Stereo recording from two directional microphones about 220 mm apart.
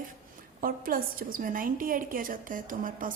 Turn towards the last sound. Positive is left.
turn(degrees=-40)  # may be behind; listen again after turning